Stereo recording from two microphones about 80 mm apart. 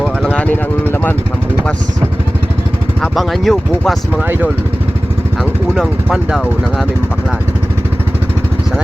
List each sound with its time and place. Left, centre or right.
0.3 s speech: left
3.0 s speech: centre